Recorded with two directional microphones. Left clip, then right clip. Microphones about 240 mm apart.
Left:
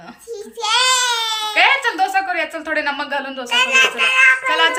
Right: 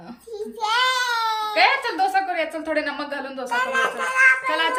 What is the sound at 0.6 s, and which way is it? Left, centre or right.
Baby cry, centre.